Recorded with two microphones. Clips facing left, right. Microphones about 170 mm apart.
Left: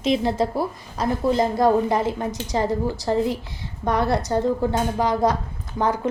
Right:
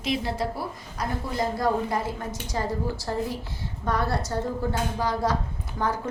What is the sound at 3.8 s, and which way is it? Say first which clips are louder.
Speech: left 5 dB; 20° left (ahead or behind).